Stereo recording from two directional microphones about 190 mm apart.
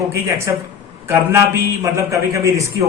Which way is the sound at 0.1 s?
15° right (ahead or behind).